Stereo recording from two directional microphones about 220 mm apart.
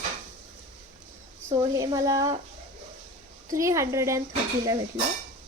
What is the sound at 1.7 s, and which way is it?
Speech, 15° right (ahead or behind).